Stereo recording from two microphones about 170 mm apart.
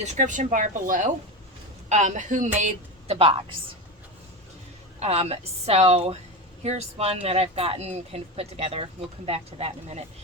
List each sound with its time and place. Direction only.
0.0 s a woman's voice: 45° right (ahead or behind)
4.9 s speech: 40° right (ahead or behind)